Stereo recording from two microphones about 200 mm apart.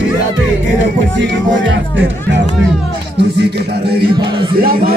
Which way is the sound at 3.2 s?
55° right (ahead or behind).